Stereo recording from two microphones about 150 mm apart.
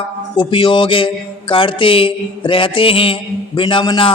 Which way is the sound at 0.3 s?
30° left (ahead or behind).